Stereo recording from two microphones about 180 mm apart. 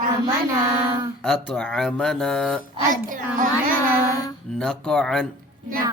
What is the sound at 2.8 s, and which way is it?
Speech, 45° right (ahead or behind).